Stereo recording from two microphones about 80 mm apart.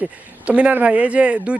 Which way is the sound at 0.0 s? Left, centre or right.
Centre.